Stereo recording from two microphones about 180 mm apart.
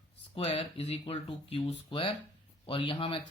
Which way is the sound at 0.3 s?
30° left (ahead or behind).